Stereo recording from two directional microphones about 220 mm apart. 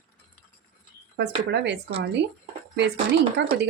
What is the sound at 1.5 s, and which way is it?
Speech, 50° right (ahead or behind).